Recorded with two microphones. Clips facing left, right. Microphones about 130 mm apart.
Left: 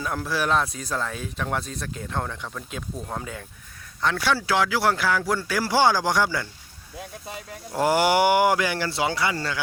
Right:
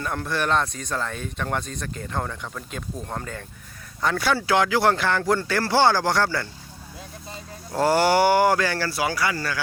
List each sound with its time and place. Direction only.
0.0 s speech: 5° left (ahead or behind)
7.7 s speech: 15° left (ahead or behind)